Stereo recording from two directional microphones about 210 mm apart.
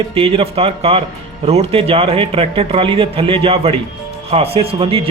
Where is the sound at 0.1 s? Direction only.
25° right (ahead or behind).